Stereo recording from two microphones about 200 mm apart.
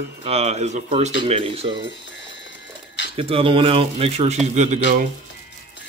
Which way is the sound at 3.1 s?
30° right (ahead or behind).